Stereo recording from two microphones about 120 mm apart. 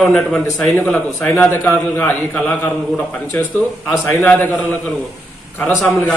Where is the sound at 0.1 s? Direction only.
5° left (ahead or behind).